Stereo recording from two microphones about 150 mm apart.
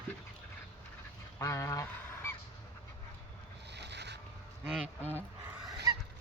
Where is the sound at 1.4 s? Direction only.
20° left (ahead or behind).